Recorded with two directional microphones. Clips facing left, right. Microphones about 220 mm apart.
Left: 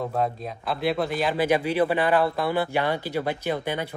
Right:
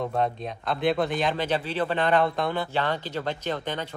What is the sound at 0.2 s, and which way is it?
Speech, 5° left (ahead or behind).